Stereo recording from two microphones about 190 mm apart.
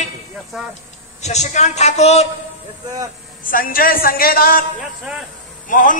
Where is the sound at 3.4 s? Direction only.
45° left (ahead or behind).